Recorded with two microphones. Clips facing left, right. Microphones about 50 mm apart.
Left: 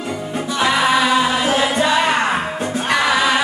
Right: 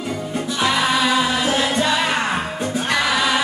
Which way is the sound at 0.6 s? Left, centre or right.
Centre.